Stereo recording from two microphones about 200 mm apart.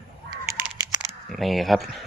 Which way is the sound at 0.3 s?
15° right (ahead or behind).